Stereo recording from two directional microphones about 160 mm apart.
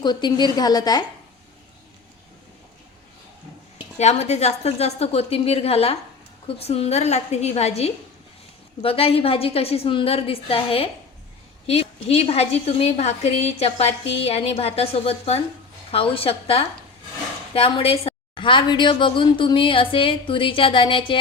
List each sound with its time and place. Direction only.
0.0 s a woman's voice: 25° left (ahead or behind)
3.9 s a woman's voice: 45° left (ahead or behind)